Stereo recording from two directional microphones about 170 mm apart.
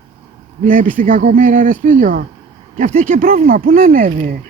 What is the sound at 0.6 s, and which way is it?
Speech, 50° right (ahead or behind).